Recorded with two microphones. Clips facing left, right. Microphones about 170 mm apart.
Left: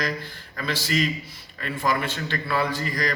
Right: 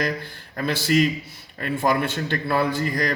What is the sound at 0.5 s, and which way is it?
A man's voice, 50° right (ahead or behind).